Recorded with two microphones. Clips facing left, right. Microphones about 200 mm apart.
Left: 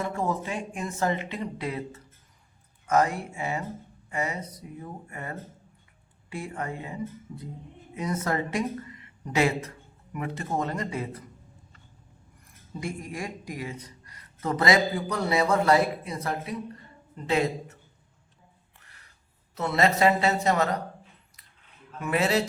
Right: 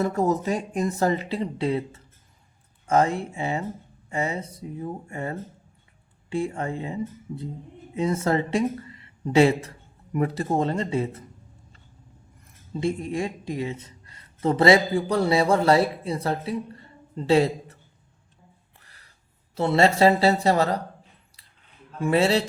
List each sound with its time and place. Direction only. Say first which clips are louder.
0.0 s speech: right 6 dB; 40° right (ahead or behind)
12.7 s speech: right 8 dB; 25° right (ahead or behind)
18.8 s a sound: left 2 dB; 35° right (ahead or behind)
19.5 s speech: right 4 dB; 30° right (ahead or behind)
21.9 s speech: right 4 dB; 30° right (ahead or behind)